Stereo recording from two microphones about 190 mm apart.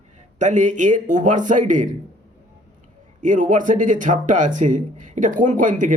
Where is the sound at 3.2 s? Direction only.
45° right (ahead or behind).